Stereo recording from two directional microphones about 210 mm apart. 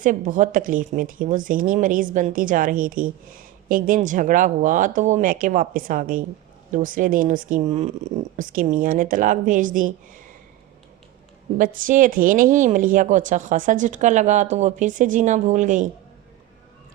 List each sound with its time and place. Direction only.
0.0 s a woman's voice: 40° right (ahead or behind)
11.5 s a woman's voice: 40° right (ahead or behind)